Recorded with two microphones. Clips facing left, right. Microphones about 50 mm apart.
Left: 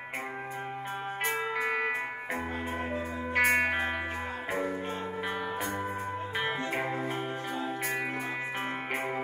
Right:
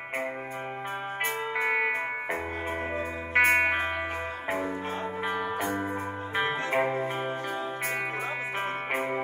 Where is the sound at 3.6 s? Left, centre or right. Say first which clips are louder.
Right 2 dB; right.